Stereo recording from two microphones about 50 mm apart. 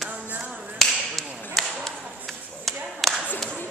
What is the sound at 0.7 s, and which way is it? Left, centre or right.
Whip, centre.